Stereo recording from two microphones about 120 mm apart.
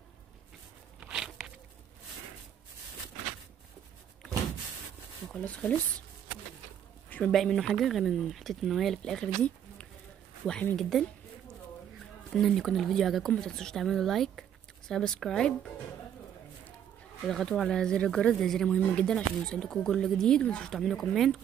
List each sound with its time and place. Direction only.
1.0 s a sound: 5° right (ahead or behind)
5.3 s speech: 10° left (ahead or behind)
7.1 s speech: 5° left (ahead or behind)
12.4 s speech: centre (ahead or behind)
17.3 s speech: centre (ahead or behind)